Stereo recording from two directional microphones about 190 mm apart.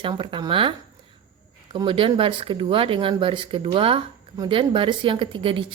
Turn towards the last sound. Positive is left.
turn(degrees=-25)  # may be behind; listen again after turning